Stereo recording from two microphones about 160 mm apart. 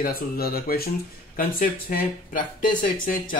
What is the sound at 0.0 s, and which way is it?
Speech, 70° left (ahead or behind).